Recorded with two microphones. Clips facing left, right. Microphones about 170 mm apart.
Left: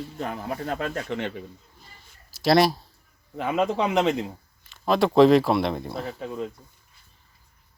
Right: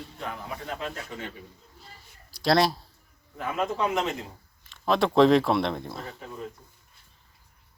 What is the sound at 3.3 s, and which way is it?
Speech, 85° left.